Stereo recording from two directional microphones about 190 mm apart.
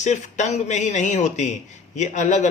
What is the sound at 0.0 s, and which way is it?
Speech, 40° left (ahead or behind).